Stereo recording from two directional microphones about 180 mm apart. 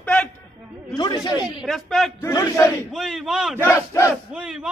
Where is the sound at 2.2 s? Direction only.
15° left (ahead or behind).